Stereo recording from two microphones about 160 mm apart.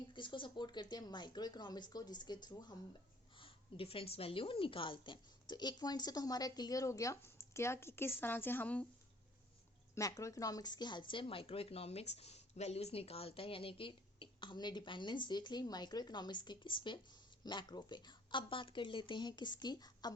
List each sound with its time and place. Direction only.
0.1 s speech: 30° left (ahead or behind); by 8.9 s 10° left (ahead or behind)
9.9 s speech: 20° left (ahead or behind)